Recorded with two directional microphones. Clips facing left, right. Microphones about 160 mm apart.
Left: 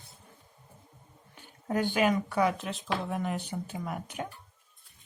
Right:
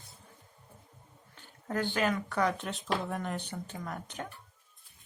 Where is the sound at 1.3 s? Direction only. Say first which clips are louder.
Left 3 dB; 15° left (ahead or behind).